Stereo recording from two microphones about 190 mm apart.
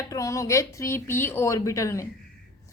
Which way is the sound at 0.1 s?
15° left (ahead or behind).